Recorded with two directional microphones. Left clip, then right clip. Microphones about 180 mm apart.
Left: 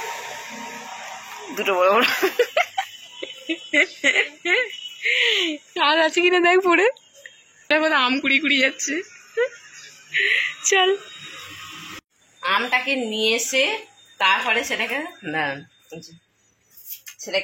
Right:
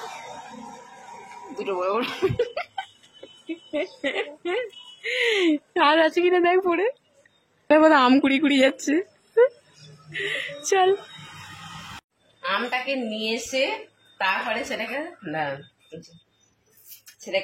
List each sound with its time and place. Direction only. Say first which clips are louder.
1.6 s speech: left 8 dB; 5° left (ahead or behind)
3.4 s speech: left 9 dB; centre (ahead or behind)
4.1 s a woman's voice: left 8 dB; 10° right (ahead or behind)
5.0 s a sound: left 3 dB; 35° right (ahead or behind)
5.8 s a woman's voice: left 1 dB; 20° right (ahead or behind); by 6.9 s 5° right (ahead or behind)
7.7 s a woman's voice: right 3 dB; 40° right (ahead or behind)
10.1 s a sound: left 9 dB; 25° right (ahead or behind)
12.4 s a woman's voice: left 5 dB; 25° left (ahead or behind)